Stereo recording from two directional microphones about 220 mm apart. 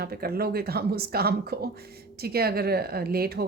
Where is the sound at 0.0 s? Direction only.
45° right (ahead or behind).